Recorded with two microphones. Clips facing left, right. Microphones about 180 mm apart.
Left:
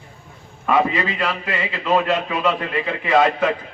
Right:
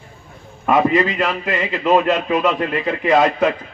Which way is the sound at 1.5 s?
40° right (ahead or behind).